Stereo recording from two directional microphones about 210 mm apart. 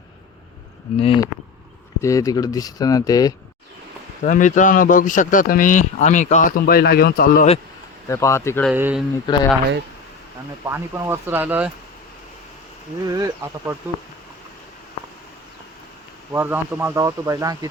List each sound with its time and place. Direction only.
0.9 s speech: 25° left (ahead or behind)
2.0 s speech: 15° left (ahead or behind)
4.2 s a man's voice: 35° left (ahead or behind)
8.0 s speech: 15° left (ahead or behind)
8.7 s speech: 5° right (ahead or behind)
9.2 s speech: 20° left (ahead or behind)
10.7 s speech: 10° right (ahead or behind)
13.1 s speech: 15° right (ahead or behind)
16.3 s speech: 10° right (ahead or behind)